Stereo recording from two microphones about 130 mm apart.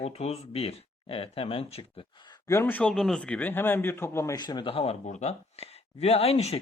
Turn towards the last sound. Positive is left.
turn(degrees=50)  # may be behind; listen again after turning